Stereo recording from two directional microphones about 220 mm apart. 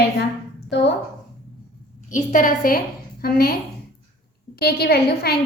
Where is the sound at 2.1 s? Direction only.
35° left (ahead or behind).